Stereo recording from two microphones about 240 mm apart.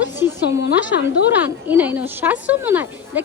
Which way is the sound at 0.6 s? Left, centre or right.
Left.